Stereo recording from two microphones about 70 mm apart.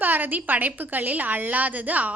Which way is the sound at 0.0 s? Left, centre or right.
Right.